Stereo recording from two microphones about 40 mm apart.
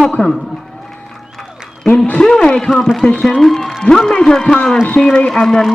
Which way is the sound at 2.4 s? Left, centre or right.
Centre.